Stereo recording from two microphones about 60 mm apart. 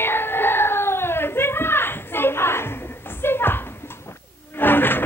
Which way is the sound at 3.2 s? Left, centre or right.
Left.